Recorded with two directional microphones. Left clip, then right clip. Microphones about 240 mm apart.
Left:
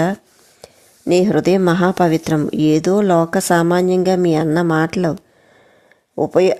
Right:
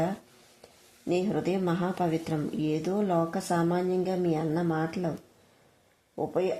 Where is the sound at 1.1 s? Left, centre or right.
Left.